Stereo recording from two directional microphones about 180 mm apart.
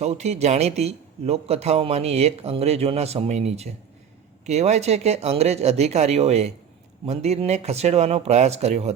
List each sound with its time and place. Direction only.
0.0 s a man's voice: 35° right (ahead or behind)